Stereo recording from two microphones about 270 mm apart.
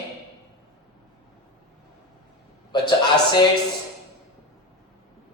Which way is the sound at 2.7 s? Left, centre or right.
Centre.